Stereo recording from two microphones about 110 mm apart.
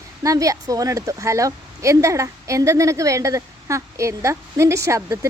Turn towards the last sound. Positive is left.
turn(degrees=-25)  # may be behind; listen again after turning